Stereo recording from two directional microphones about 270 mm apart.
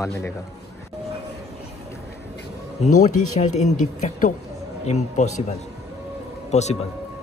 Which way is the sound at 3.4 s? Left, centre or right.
Left.